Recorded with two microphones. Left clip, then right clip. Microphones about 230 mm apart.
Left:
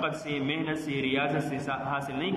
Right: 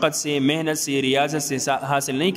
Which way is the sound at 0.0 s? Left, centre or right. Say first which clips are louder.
Right 10 dB; right.